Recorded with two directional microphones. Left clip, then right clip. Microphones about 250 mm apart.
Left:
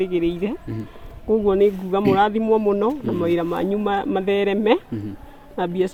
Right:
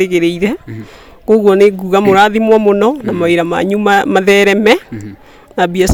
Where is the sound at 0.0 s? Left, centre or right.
Right.